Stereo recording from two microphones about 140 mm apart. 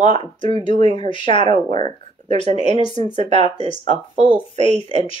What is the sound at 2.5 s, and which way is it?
Speech, 35° left (ahead or behind).